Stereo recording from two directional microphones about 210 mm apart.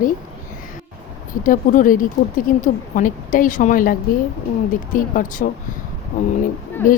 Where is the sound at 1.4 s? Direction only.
40° left (ahead or behind).